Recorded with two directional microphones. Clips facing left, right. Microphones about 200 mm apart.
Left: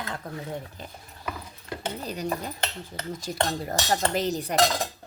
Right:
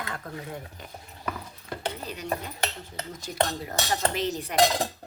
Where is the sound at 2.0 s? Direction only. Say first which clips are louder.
Left 5 dB; 40° left (ahead or behind).